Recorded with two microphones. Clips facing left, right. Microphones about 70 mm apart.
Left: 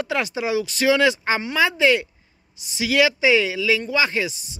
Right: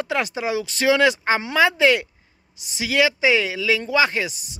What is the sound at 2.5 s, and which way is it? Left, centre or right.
Speech, right.